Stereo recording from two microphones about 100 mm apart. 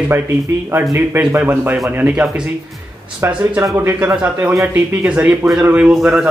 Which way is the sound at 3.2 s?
30° right (ahead or behind).